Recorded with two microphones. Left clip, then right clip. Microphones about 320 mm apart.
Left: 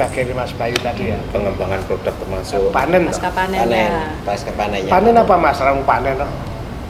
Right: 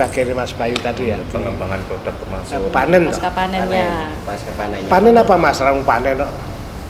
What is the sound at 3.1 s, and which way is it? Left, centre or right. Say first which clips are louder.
Speech: even; right.